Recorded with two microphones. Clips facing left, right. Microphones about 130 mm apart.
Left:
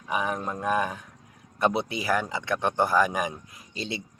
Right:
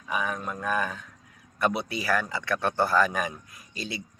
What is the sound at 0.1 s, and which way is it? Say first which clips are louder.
Speech: left 2 dB; 25° left (ahead or behind).